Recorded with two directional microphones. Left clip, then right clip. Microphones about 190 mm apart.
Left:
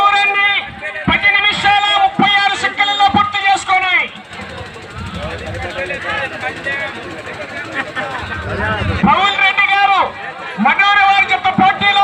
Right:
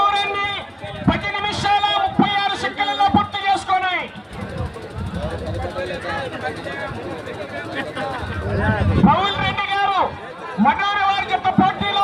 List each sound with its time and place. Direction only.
0.0 s run: 30° right (ahead or behind)
1.0 s music: 30° right (ahead or behind)
9.0 s a sound: 30° right (ahead or behind)